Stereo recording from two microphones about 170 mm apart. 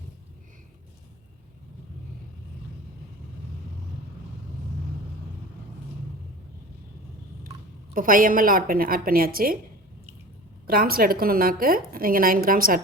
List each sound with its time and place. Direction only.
7.9 s a woman's voice: 55° right (ahead or behind)
10.7 s a woman's voice: 60° right (ahead or behind)